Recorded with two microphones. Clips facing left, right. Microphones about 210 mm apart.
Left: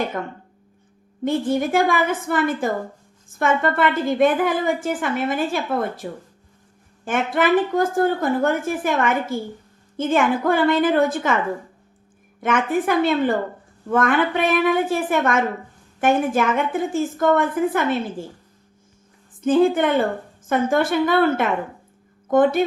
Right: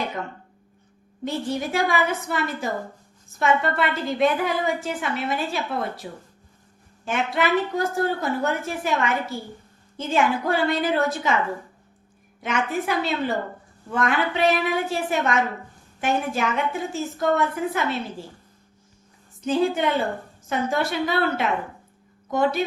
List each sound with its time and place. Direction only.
0.1 s a woman's voice: 55° left (ahead or behind)
12.4 s a woman's voice: 50° left (ahead or behind)
19.4 s a woman's voice: 50° left (ahead or behind)